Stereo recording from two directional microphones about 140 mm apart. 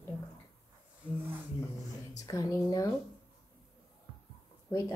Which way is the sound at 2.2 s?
25° left (ahead or behind).